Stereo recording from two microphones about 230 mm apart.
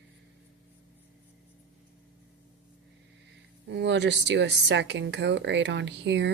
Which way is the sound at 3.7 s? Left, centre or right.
Right.